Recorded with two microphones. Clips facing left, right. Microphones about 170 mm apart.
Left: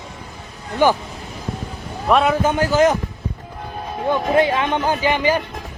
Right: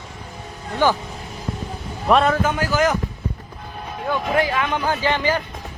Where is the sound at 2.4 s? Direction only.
25° left (ahead or behind).